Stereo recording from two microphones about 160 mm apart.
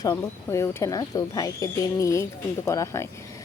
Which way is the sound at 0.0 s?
20° left (ahead or behind).